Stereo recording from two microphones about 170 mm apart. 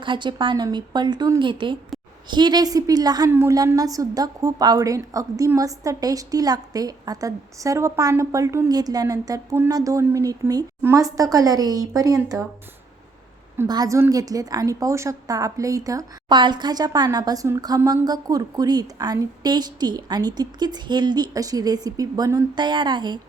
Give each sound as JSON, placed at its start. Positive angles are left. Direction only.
{"t": 0.0, "sound": "a woman's voice", "side_deg": -30}
{"t": 13.7, "sound": "a woman's voice", "side_deg": -20}